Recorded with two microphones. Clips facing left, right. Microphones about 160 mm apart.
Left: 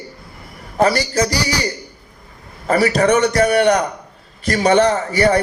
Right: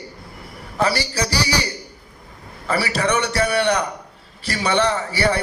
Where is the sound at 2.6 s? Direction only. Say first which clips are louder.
Left 7 dB; 45° left (ahead or behind).